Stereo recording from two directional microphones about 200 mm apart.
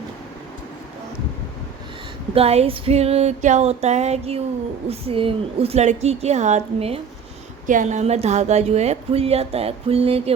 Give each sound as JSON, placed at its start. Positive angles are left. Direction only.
{"t": 2.3, "sound": "speech", "side_deg": -30}